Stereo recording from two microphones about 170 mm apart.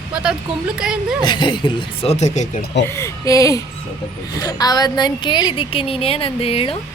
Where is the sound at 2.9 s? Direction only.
15° left (ahead or behind).